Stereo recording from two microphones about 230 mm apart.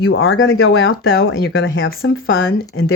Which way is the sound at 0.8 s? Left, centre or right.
Left.